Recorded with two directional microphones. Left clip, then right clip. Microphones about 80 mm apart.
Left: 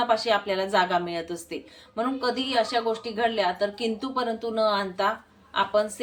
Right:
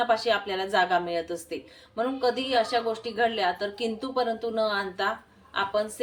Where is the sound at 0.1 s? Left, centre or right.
Left.